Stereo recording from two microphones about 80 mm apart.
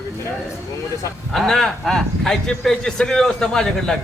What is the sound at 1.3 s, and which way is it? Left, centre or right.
Speech, centre.